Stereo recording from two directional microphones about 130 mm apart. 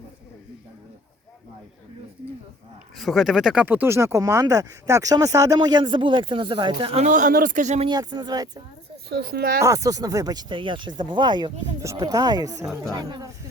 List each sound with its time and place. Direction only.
3.0 s speech: centre (ahead or behind); by 6.9 s 40° right (ahead or behind)
6.9 s speech: 70° right (ahead or behind)
7.9 s speech: 35° right (ahead or behind)
9.6 s speech: 25° right (ahead or behind)
11.6 s speech: 25° right (ahead or behind)